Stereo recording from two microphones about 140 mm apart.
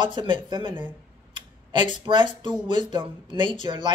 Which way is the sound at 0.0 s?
35° right (ahead or behind).